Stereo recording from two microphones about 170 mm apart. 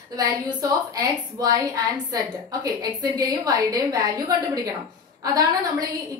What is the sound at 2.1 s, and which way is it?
A woman's voice, 20° right (ahead or behind).